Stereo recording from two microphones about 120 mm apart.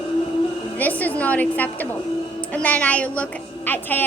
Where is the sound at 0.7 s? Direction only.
15° left (ahead or behind).